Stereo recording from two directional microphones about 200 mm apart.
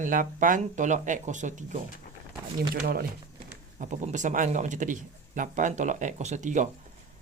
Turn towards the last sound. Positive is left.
turn(degrees=-40)  # may be behind; listen again after turning